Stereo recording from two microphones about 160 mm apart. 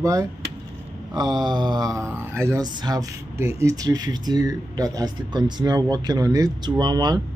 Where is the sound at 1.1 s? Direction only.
25° right (ahead or behind).